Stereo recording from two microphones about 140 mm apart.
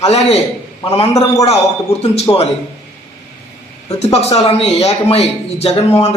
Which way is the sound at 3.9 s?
50° left (ahead or behind).